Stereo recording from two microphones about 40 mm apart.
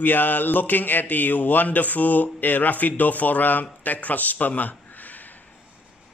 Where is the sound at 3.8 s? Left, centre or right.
Left.